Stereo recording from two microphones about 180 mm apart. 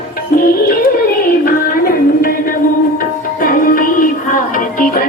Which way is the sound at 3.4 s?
50° left (ahead or behind).